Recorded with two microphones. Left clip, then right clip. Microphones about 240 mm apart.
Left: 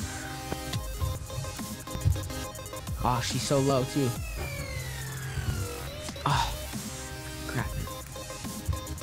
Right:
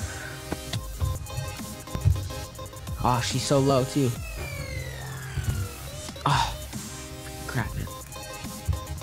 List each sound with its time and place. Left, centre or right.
3.0 s speech: left
6.2 s music: left